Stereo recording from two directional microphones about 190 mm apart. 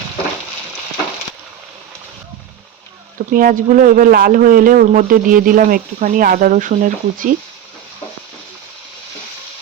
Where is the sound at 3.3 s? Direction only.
45° right (ahead or behind).